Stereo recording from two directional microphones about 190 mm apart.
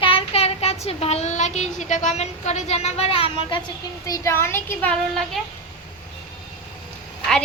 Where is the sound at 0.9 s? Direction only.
30° left (ahead or behind).